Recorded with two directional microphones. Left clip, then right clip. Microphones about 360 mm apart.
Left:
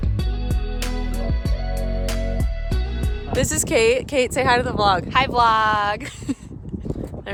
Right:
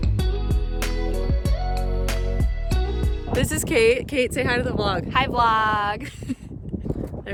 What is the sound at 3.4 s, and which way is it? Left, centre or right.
Speech, centre.